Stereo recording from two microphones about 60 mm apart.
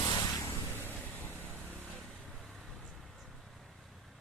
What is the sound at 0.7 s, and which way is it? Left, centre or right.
Vehicle, right.